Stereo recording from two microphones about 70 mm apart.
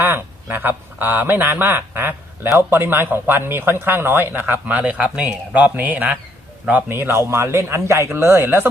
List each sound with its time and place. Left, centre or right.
0.0 s speech: right
4.8 s a man's voice: centre
6.9 s speech: right